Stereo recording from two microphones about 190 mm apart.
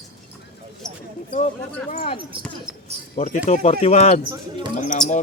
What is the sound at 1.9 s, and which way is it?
Speech, 30° left (ahead or behind).